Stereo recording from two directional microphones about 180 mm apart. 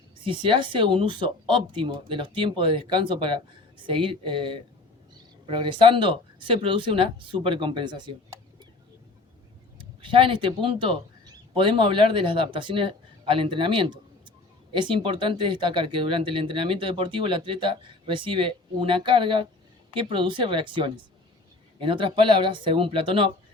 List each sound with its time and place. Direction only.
0.3 s speech: 30° right (ahead or behind)
9.7 s a man's voice: 30° right (ahead or behind)